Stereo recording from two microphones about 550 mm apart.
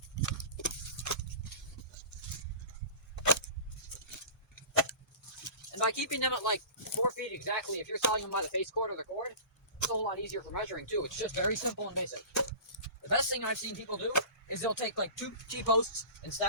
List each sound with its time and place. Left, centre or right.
0.2 s horse: left
3.2 s a sound: left
5.5 s speech: left